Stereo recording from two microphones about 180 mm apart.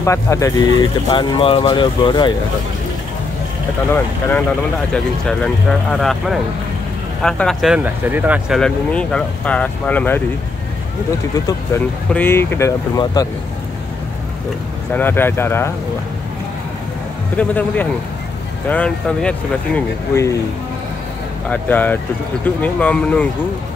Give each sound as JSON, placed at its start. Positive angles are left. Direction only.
{"t": 0.0, "sound": "speech", "side_deg": 15}
{"t": 4.9, "sound": "speech", "side_deg": 5}
{"t": 8.5, "sound": "speech", "side_deg": 5}
{"t": 11.3, "sound": "speech", "side_deg": 20}
{"t": 14.9, "sound": "speech", "side_deg": 10}
{"t": 17.4, "sound": "speech", "side_deg": 10}
{"t": 21.5, "sound": "speech", "side_deg": 10}